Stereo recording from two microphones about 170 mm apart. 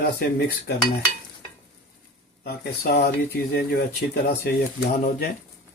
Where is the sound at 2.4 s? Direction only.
70° left (ahead or behind).